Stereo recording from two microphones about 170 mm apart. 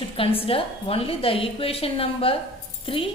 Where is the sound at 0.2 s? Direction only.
35° left (ahead or behind).